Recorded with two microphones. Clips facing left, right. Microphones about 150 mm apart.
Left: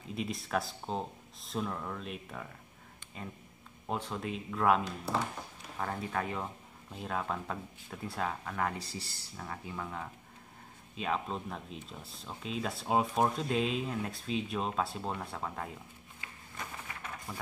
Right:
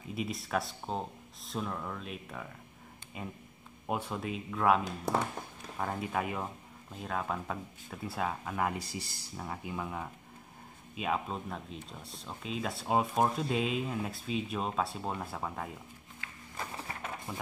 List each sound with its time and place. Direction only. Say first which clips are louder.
0.1 s speech: even; centre (ahead or behind)
16.5 s a sound: right 3 dB; 35° right (ahead or behind)
17.3 s speech: right 1 dB; centre (ahead or behind)